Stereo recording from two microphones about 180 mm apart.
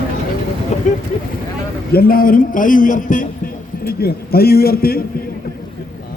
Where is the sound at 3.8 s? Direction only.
60° left (ahead or behind).